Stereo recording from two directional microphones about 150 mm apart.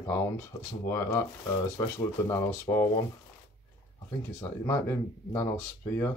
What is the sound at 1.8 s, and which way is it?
Speech, 25° left (ahead or behind).